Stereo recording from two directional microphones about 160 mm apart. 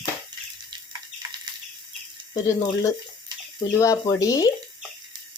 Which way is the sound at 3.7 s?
20° left (ahead or behind).